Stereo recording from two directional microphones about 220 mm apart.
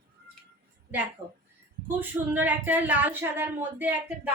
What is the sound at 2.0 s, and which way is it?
Speech, 10° right (ahead or behind).